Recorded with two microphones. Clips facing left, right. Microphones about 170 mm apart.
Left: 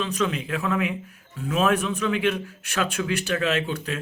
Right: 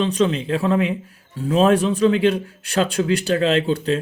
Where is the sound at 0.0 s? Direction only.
30° right (ahead or behind).